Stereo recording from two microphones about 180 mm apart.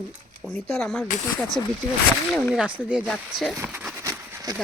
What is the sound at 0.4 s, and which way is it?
Speech, centre (ahead or behind).